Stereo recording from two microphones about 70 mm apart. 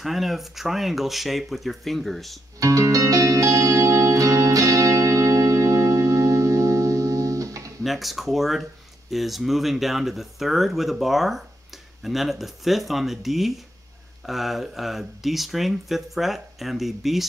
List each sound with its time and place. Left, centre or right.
0.0 s speech: centre
2.6 s music: right
7.8 s speech: centre